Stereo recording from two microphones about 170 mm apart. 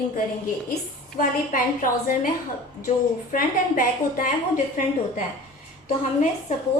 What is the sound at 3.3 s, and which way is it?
A woman's voice, 55° left (ahead or behind).